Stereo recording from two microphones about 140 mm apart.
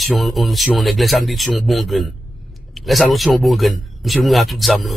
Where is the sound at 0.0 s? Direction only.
Centre (ahead or behind).